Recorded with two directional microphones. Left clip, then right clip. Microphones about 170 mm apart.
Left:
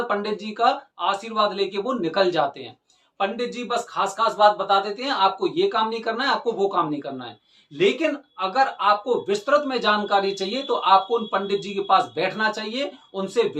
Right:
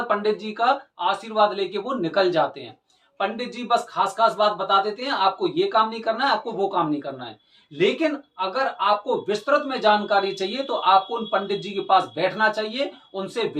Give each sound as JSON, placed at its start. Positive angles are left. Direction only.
{"t": 0.1, "sound": "speech", "side_deg": 15}